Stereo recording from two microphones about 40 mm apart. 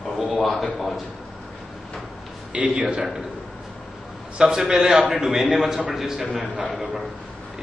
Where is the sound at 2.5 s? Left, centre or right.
Right.